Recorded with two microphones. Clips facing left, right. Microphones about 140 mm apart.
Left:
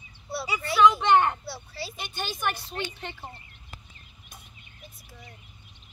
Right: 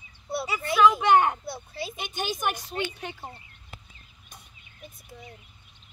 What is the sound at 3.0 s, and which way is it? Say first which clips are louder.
Speech: right 1 dB; 10° right (ahead or behind).